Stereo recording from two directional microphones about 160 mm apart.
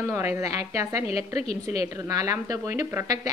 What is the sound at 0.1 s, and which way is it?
A woman's voice, 15° right (ahead or behind).